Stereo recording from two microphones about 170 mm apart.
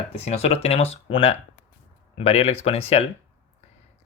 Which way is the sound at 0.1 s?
35° left (ahead or behind).